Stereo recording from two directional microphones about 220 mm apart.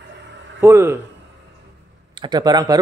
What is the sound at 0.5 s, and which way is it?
Speech, 10° right (ahead or behind).